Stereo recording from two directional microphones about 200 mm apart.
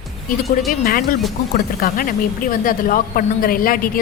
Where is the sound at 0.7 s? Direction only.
45° left (ahead or behind).